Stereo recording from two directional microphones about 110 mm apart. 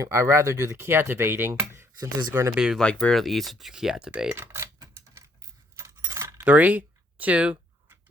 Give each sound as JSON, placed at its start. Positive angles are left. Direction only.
{"t": 0.0, "sound": "speech", "side_deg": -30}
{"t": 2.7, "sound": "speech", "side_deg": 5}
{"t": 4.4, "sound": "keys jangling", "side_deg": -25}
{"t": 6.4, "sound": "a sound", "side_deg": -15}